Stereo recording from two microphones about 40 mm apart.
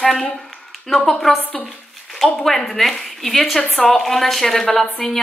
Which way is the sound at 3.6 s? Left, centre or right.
Centre.